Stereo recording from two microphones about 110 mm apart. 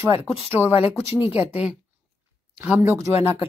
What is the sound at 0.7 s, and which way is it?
Speech, 60° left (ahead or behind).